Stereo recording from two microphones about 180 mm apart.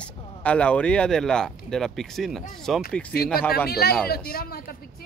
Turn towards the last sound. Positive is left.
turn(degrees=55)  # may be behind; listen again after turning